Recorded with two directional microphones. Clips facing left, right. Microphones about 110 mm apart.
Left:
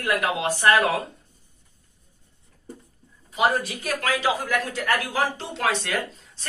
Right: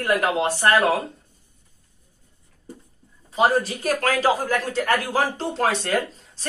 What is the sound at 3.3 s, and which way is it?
Speech, 30° right (ahead or behind).